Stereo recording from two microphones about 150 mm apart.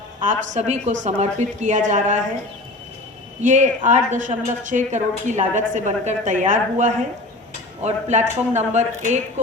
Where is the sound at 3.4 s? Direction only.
55° right (ahead or behind).